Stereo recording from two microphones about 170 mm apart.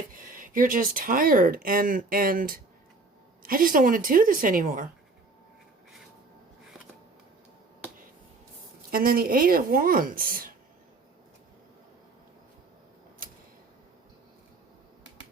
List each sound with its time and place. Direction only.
0.1 s speech: 55° right (ahead or behind)
8.9 s speech: 60° right (ahead or behind)